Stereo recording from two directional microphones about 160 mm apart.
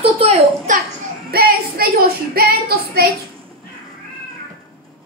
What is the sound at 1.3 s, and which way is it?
Child singing, 65° right (ahead or behind).